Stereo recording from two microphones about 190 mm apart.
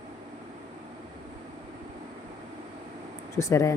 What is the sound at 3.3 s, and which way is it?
Speech, 15° left (ahead or behind).